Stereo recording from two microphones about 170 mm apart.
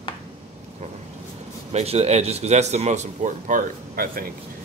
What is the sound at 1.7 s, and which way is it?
A man's voice, 40° right (ahead or behind).